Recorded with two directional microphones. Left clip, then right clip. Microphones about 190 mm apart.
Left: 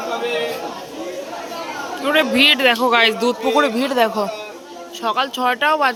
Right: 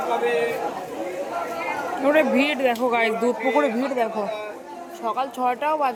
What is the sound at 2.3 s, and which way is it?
Speech, centre (ahead or behind).